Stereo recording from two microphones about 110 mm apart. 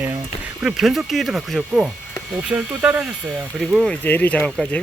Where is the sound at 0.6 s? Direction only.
Centre (ahead or behind).